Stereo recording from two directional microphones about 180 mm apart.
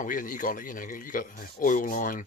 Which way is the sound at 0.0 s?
45° left (ahead or behind).